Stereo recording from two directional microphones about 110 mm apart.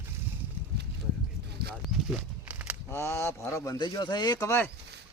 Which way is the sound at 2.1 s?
15° right (ahead or behind).